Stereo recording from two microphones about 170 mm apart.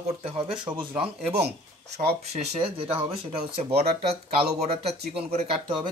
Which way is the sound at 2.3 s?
35° right (ahead or behind).